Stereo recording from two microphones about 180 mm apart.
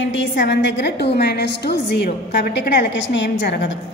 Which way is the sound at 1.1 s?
65° left (ahead or behind).